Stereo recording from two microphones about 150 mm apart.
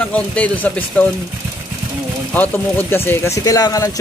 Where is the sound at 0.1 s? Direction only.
10° left (ahead or behind).